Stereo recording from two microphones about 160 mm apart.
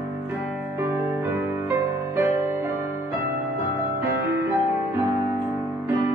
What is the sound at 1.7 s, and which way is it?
Music, 15° right (ahead or behind).